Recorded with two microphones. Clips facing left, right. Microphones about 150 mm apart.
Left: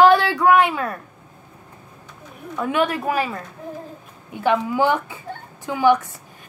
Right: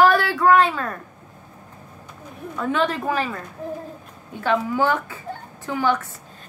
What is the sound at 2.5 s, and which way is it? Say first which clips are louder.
Speech: left 1 dB; 10° left (ahead or behind).